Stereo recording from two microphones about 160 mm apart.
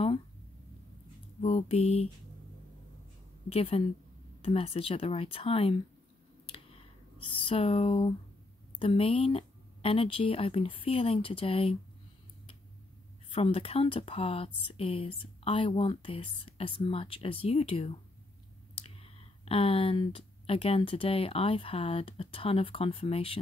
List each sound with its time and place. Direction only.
1.4 s speech: 40° left (ahead or behind)
3.4 s speech: 40° left (ahead or behind)
7.3 s speech: 35° left (ahead or behind)
13.3 s speech: 35° left (ahead or behind)